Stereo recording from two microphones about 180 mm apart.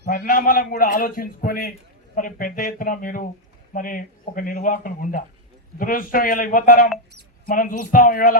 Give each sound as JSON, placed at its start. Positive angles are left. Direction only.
{"t": 0.1, "sound": "a man's voice", "side_deg": 50}